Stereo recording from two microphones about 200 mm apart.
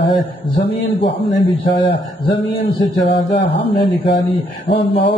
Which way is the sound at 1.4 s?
25° left (ahead or behind).